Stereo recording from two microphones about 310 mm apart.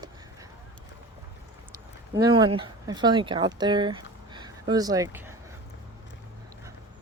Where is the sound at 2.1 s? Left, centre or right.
Centre.